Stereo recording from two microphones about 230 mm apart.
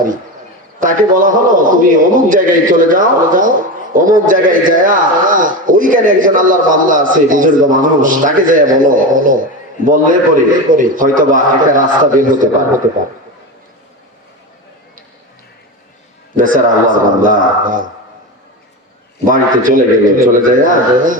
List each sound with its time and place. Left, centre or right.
0.8 s a man's voice: right
16.4 s a man's voice: right
19.2 s a man's voice: right